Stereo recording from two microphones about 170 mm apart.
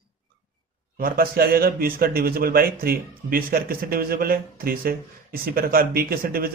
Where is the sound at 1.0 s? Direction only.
60° right (ahead or behind).